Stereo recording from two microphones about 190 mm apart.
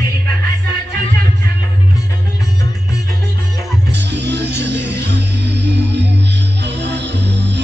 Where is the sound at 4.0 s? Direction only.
65° right (ahead or behind).